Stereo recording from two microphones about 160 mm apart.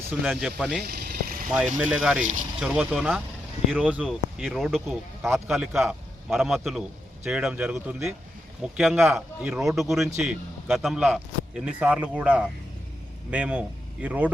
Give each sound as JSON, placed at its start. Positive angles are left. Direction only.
{"t": 0.1, "sound": "speech", "side_deg": -5}
{"t": 0.9, "sound": "vehicle", "side_deg": -75}
{"t": 1.8, "sound": "a man's voice", "side_deg": -5}